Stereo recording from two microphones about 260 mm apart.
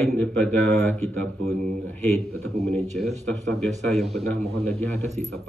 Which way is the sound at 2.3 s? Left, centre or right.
Centre.